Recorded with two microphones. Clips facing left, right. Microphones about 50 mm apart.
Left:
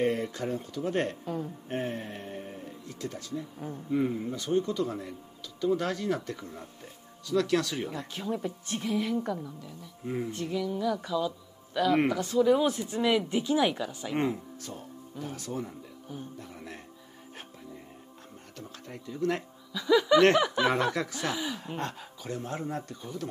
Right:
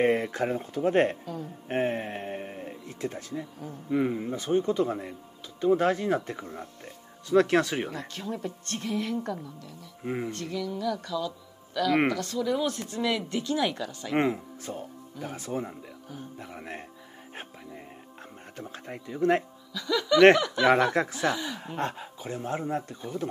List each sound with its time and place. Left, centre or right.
0.0 s speech: right
1.2 s speech: left
1.7 s music: right
2.9 s speech: right
8.1 s speech: centre
10.0 s speech: right
10.3 s speech: centre
14.1 s speech: right
18.6 s speech: right
19.7 s speech: centre
20.8 s speech: right
21.3 s speech: centre
21.7 s speech: right